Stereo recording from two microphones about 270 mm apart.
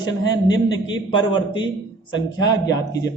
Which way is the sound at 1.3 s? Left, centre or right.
Centre.